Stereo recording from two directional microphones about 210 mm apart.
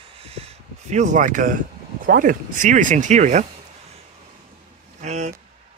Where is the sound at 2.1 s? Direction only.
40° right (ahead or behind).